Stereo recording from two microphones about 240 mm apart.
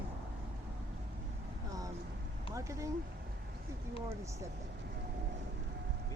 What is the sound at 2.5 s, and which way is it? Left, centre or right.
Speech, centre.